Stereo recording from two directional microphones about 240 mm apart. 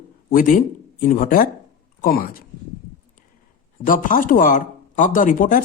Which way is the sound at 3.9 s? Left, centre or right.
Left.